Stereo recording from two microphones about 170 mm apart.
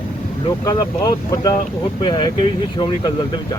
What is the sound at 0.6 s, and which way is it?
Speech, 20° left (ahead or behind).